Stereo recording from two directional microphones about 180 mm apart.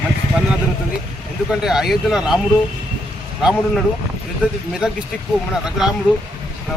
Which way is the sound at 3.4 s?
5° right (ahead or behind).